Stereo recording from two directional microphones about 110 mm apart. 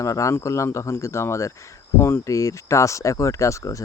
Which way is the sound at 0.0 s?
30° left (ahead or behind).